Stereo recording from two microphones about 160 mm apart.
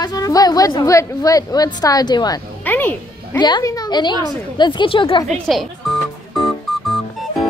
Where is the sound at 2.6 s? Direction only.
10° left (ahead or behind).